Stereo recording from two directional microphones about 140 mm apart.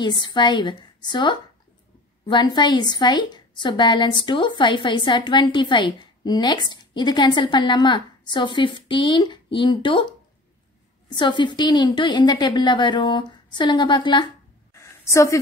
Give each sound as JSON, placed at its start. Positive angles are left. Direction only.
{"t": 0.0, "sound": "a woman's voice", "side_deg": 35}
{"t": 11.1, "sound": "a woman's voice", "side_deg": 35}
{"t": 14.7, "sound": "a sound", "side_deg": 20}